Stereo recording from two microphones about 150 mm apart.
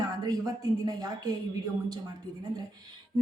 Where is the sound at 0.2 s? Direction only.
25° right (ahead or behind).